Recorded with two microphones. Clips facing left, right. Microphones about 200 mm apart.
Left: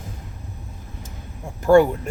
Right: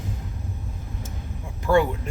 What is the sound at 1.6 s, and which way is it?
Speech, 45° left (ahead or behind).